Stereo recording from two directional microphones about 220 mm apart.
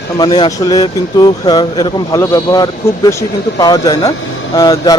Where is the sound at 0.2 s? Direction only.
20° left (ahead or behind).